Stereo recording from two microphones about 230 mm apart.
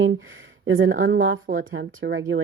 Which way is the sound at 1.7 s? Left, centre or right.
Right.